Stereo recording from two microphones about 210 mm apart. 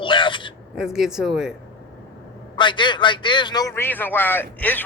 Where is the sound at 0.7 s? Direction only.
Centre (ahead or behind).